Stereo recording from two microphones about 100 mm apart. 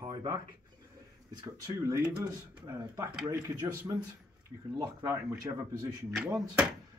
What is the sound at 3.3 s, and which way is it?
Speech, 30° right (ahead or behind).